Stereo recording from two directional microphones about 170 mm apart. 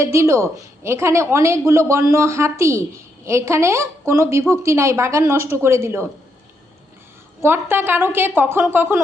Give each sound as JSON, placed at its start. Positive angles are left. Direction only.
{"t": 0.0, "sound": "a woman's voice", "side_deg": -15}
{"t": 7.4, "sound": "a woman's voice", "side_deg": -15}